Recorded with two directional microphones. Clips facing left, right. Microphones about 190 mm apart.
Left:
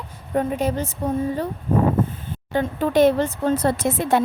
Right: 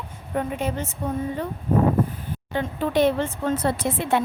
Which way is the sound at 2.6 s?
45° left (ahead or behind).